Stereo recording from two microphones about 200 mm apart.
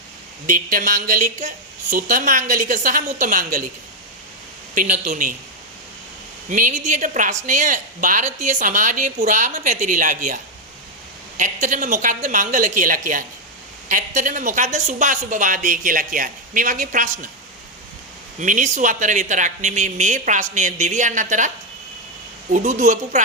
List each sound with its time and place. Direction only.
0.4 s a woman's voice: 40° right (ahead or behind)
4.7 s a woman's voice: 40° right (ahead or behind)
6.5 s a woman's voice: 40° right (ahead or behind)
18.3 s a woman's voice: 40° right (ahead or behind)
22.5 s a woman's voice: 40° right (ahead or behind)